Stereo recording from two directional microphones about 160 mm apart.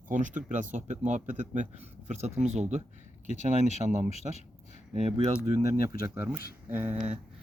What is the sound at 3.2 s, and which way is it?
Speech, 45° left (ahead or behind).